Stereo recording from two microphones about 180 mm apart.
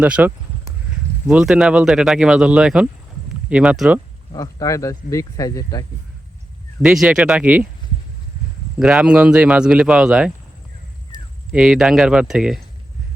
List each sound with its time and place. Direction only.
0.0 s speech: 10° right (ahead or behind)
4.4 s speech: 15° left (ahead or behind)
6.8 s speech: 5° right (ahead or behind)
8.8 s speech: 5° right (ahead or behind)
11.5 s speech: centre (ahead or behind)